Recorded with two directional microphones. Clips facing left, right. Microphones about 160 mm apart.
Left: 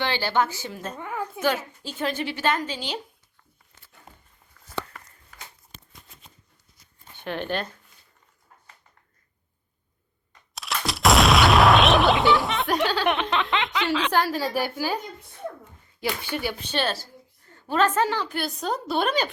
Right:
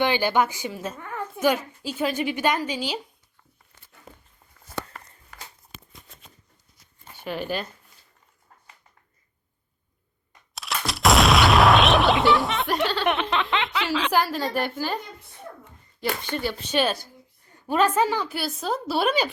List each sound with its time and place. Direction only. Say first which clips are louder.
0.0 s a woman's voice: right 3 dB; 15° right (ahead or behind)
0.9 s a woman's voice: left 3 dB; 15° left (ahead or behind)
1.4 s a woman's voice: right 4 dB; 10° right (ahead or behind)
7.2 s speech: even; 5° right (ahead or behind)
10.5 s a sound: even; centre (ahead or behind)
16.3 s speech: right 1 dB; 5° left (ahead or behind)
16.7 s a woman's voice: right 5 dB; 10° right (ahead or behind)